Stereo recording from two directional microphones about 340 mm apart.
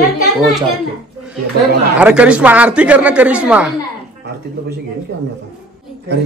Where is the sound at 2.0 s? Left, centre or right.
Centre.